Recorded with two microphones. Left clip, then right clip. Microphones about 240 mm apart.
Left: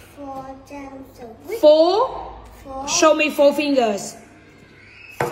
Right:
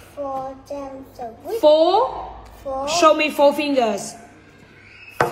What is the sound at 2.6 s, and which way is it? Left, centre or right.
A woman's voice, centre.